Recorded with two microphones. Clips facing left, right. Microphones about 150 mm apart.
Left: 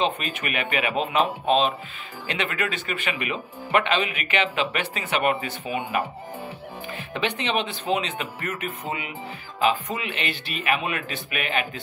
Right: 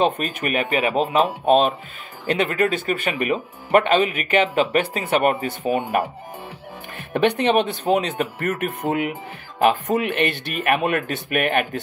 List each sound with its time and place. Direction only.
0.0 s speech: 40° right (ahead or behind)
7.2 s speech: 50° right (ahead or behind)